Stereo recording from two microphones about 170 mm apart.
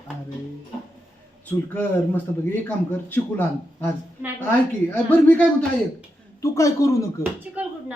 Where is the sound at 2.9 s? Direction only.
10° left (ahead or behind).